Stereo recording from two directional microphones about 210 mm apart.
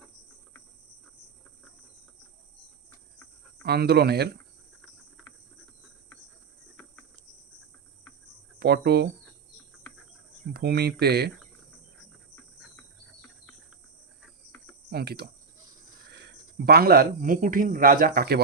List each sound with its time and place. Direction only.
3.6 s speech: 50° right (ahead or behind)
8.5 s speech: 50° right (ahead or behind)
10.5 s speech: 50° right (ahead or behind)
14.8 s cricket: 50° right (ahead or behind)
16.6 s speech: 50° right (ahead or behind)